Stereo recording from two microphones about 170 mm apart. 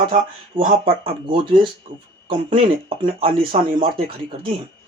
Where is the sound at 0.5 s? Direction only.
30° right (ahead or behind).